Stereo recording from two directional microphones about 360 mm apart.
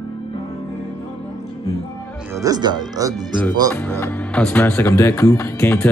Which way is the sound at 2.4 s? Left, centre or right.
Centre.